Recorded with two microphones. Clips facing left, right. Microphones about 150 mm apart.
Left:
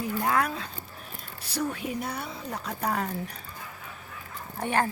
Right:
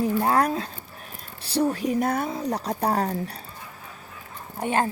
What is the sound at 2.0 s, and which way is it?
Speech, 50° right (ahead or behind).